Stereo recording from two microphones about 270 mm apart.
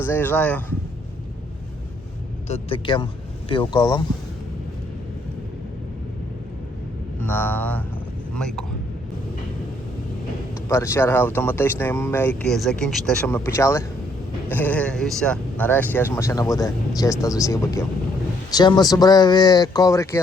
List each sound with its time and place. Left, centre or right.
0.0 s a man's voice: centre
2.5 s a man's voice: left
7.2 s a man's voice: centre
10.7 s a man's voice: centre